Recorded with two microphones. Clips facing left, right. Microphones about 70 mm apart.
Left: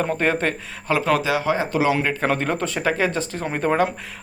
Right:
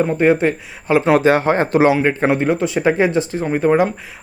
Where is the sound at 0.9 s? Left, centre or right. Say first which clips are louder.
Right 8 dB; right.